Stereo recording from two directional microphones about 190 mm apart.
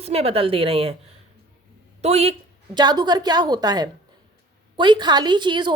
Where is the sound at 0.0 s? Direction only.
30° right (ahead or behind).